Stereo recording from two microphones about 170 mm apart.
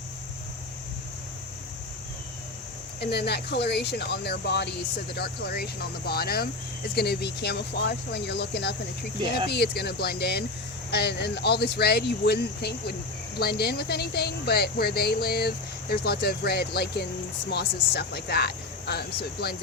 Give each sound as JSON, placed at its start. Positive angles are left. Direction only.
{"t": 3.0, "sound": "a woman's voice", "side_deg": 75}